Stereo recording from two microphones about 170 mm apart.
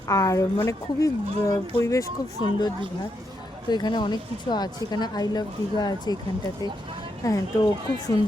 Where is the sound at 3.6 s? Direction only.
25° left (ahead or behind).